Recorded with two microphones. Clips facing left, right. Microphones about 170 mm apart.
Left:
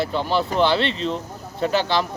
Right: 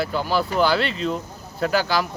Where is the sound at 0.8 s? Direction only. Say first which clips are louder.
Left 1 dB; 30° left (ahead or behind).